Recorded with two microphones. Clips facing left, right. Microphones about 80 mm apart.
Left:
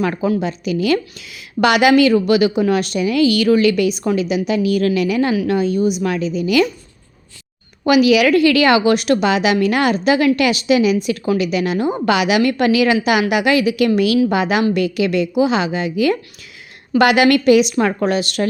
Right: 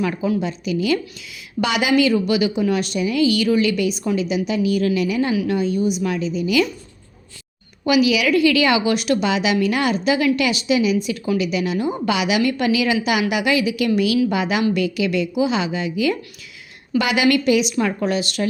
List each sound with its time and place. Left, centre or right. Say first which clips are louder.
0.0 s a woman's voice: left 3 dB; left
7.9 s a woman's voice: left 5 dB; left